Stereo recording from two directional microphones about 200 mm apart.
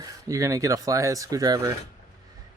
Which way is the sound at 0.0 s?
15° right (ahead or behind).